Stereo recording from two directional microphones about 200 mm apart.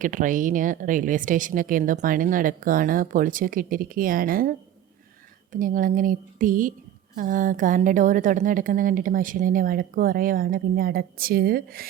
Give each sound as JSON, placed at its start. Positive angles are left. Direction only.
{"t": 0.0, "sound": "a woman's voice", "side_deg": -40}